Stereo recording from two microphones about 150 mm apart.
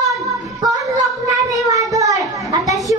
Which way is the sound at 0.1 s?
25° right (ahead or behind).